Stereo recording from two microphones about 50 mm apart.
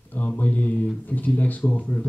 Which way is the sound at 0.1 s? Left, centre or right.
Left.